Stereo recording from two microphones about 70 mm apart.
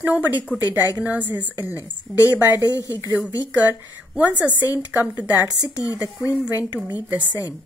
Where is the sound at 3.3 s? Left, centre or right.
Right.